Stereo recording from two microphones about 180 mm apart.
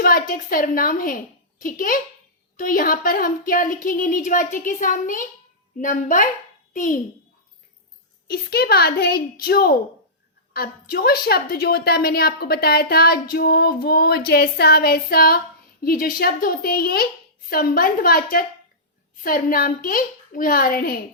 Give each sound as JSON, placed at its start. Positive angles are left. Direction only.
{"t": 0.0, "sound": "a woman's voice", "side_deg": 55}
{"t": 8.3, "sound": "a woman's voice", "side_deg": 60}